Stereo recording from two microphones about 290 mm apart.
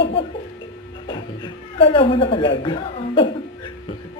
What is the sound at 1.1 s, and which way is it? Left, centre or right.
Music, centre.